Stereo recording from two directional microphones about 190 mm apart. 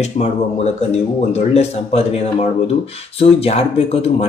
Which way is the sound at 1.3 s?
35° left (ahead or behind).